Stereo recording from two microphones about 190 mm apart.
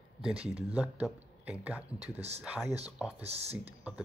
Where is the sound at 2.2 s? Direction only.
35° right (ahead or behind).